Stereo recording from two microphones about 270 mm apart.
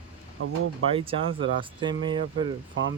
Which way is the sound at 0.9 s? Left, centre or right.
Centre.